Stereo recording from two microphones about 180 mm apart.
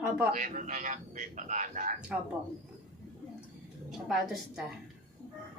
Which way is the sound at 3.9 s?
Centre (ahead or behind).